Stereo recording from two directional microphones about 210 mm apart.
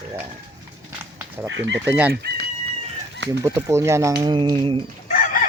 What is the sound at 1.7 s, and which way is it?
Speech, 10° right (ahead or behind).